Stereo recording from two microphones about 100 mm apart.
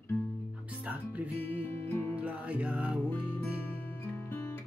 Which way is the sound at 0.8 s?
15° right (ahead or behind).